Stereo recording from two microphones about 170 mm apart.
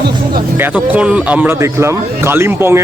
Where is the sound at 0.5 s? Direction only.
10° right (ahead or behind).